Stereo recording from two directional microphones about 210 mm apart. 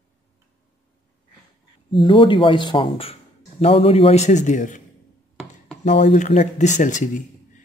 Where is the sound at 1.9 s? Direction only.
25° left (ahead or behind).